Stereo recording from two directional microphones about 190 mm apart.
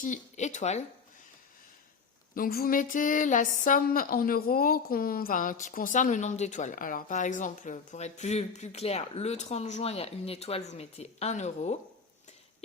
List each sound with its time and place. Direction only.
0.0 s speech: 40° left (ahead or behind)
2.3 s speech: 50° left (ahead or behind)